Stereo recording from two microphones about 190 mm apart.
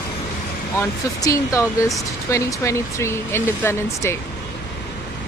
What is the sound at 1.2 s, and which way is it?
Speech, 15° left (ahead or behind).